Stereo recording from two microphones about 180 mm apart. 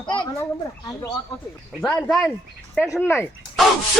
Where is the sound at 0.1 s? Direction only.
25° left (ahead or behind).